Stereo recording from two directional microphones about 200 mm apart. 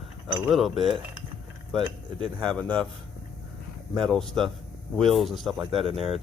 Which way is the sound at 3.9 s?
Centre (ahead or behind).